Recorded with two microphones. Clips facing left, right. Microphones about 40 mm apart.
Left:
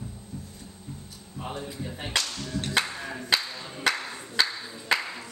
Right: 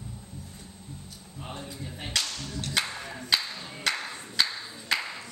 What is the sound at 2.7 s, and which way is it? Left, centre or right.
Music, centre.